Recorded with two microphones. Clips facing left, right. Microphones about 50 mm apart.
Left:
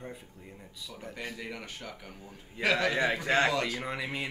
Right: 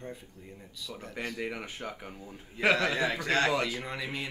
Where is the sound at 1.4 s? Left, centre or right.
Centre.